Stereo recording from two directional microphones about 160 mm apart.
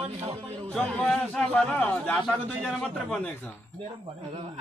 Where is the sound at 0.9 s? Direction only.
5° left (ahead or behind).